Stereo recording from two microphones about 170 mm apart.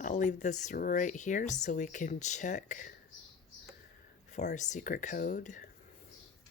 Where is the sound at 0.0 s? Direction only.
45° left (ahead or behind).